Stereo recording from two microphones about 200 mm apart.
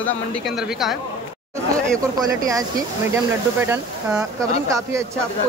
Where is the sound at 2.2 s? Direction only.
20° right (ahead or behind).